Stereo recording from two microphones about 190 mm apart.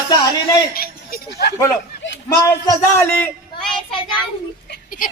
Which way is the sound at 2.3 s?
15° left (ahead or behind).